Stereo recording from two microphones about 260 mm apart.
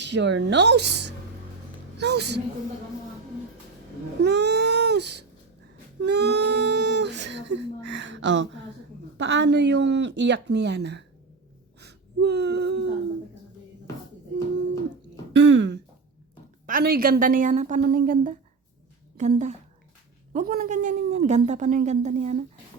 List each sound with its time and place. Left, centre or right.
0.0 s a woman's voice: right
4.2 s a sound: right
6.0 s speech: right
11.8 s gasp: right
15.3 s a woman's voice: right